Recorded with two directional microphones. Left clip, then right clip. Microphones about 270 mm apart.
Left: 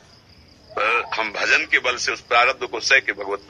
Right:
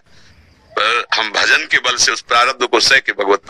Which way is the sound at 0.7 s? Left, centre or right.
Right.